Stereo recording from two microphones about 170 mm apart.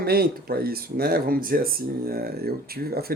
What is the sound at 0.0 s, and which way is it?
Speech, 65° right (ahead or behind).